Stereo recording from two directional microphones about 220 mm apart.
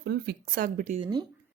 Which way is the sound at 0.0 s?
45° right (ahead or behind).